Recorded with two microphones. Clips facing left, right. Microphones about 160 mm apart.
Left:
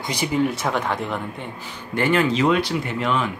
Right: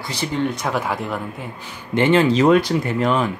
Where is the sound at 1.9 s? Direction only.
20° right (ahead or behind).